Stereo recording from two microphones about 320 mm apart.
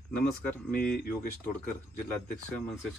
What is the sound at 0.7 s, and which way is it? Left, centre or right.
Speech, left.